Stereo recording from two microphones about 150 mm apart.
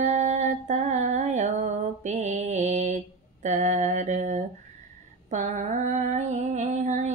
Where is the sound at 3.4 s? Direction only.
50° right (ahead or behind).